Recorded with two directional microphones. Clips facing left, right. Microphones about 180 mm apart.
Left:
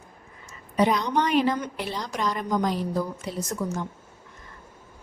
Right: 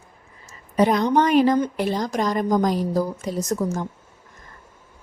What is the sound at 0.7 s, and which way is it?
Speech, 45° right (ahead or behind).